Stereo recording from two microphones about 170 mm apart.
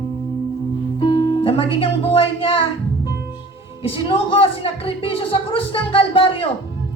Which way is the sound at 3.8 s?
35° left (ahead or behind).